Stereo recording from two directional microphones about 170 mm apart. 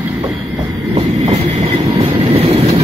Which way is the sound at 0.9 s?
35° right (ahead or behind).